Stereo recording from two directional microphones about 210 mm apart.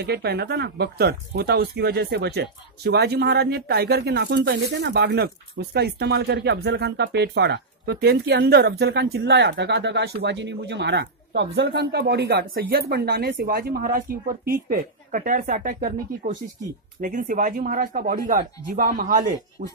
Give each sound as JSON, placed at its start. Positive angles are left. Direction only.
{"t": 0.0, "sound": "speech", "side_deg": -50}